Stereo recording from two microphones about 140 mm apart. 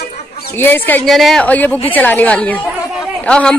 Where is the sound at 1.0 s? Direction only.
Centre (ahead or behind).